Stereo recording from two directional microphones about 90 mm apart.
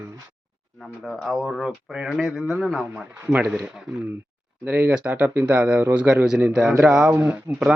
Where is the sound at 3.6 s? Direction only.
10° right (ahead or behind).